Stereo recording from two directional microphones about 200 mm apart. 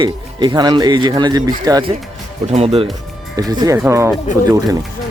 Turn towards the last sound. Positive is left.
turn(degrees=-15)  # may be behind; listen again after turning